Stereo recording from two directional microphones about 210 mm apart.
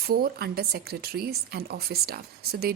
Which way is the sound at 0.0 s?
45° right (ahead or behind).